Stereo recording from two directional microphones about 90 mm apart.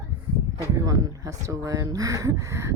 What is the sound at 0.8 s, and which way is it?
A woman's voice, 40° right (ahead or behind).